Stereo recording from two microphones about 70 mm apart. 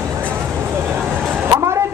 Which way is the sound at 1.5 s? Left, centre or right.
Right.